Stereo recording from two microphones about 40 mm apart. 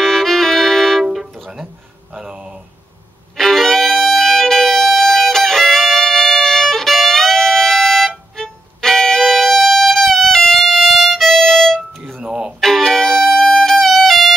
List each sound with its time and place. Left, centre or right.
0.0 s music: centre
1.0 s music: centre
2.1 s a sound: centre
3.3 s violin: centre
12.2 s music: right
12.5 s music: centre